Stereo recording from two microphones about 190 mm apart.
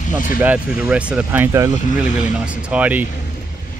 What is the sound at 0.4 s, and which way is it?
Speech, 10° right (ahead or behind).